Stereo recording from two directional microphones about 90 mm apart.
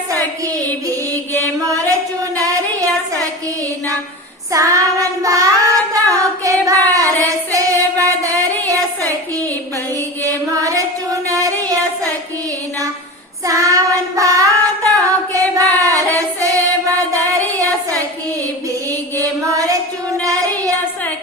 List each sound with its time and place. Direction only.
2.4 s child singing: 40° right (ahead or behind)
4.5 s child singing: 35° right (ahead or behind)
10.2 s music: 40° right (ahead or behind)
13.4 s child singing: 35° right (ahead or behind)
19.1 s music: 40° right (ahead or behind)